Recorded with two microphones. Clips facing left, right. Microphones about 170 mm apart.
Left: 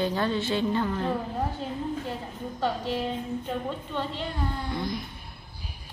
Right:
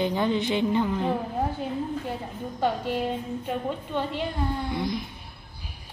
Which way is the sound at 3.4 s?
15° right (ahead or behind).